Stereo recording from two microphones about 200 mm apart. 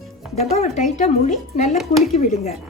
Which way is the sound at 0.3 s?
30° left (ahead or behind).